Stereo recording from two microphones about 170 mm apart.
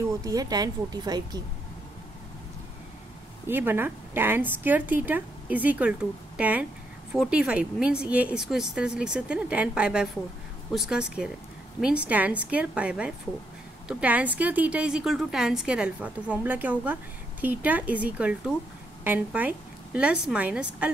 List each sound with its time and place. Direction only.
0.2 s a woman's voice: 20° right (ahead or behind)
3.4 s a woman's voice: 10° right (ahead or behind)